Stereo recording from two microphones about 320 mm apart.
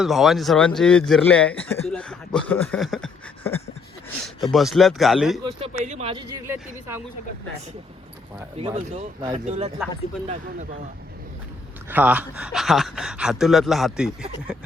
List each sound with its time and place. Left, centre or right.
0.0 s speech: centre
5.5 s a sound: centre
6.3 s speech: centre
8.5 s speech: centre
11.9 s speech: centre